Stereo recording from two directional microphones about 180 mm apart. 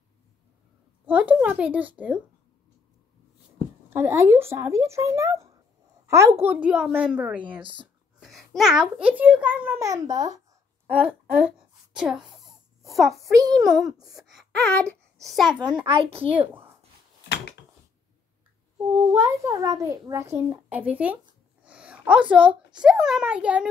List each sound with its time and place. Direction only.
1.0 s a child's voice: 10° right (ahead or behind)
3.9 s a child's voice: 15° right (ahead or behind)
7.6 s speech: 25° right (ahead or behind)
8.2 s a child's voice: centre (ahead or behind); by 10.4 s 20° right (ahead or behind)
10.9 s a sound: 10° right (ahead or behind)
13.7 s a child's voice: centre (ahead or behind)
15.8 s speech: 30° right (ahead or behind)
16.3 s a child's voice: 10° right (ahead or behind)
18.9 s a child's voice: 20° right (ahead or behind)